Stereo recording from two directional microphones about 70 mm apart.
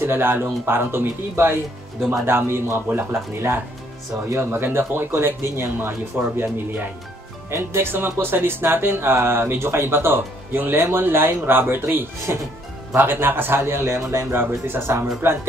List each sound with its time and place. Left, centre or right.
0.0 s speech: right
7.5 s speech: right